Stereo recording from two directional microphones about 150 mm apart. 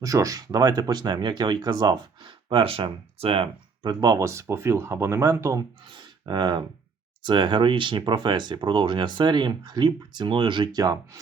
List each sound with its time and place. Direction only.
0.0 s speech: 20° right (ahead or behind)